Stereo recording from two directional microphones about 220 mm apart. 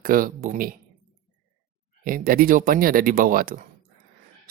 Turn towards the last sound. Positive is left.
turn(degrees=-40)  # may be behind; listen again after turning